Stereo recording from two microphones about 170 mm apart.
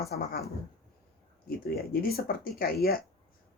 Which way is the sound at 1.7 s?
65° left (ahead or behind).